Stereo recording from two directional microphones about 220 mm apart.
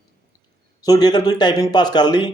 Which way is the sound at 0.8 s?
15° left (ahead or behind).